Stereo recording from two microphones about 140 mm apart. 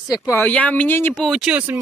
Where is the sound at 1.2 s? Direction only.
5° right (ahead or behind).